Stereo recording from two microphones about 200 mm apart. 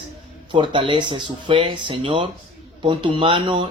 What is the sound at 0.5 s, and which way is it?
Speech, 25° right (ahead or behind).